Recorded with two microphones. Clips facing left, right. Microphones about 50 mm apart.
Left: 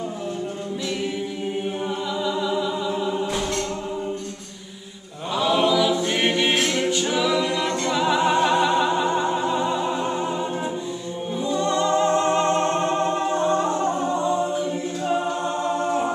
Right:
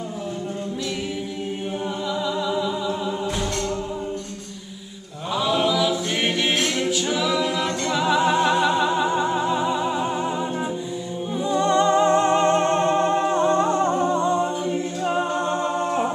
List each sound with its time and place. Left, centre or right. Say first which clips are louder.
2.2 s music: left 1 dB; centre
5.3 s a capella: left 1 dB; centre
11.4 s music: right 3 dB; right
15.6 s a capella: even; right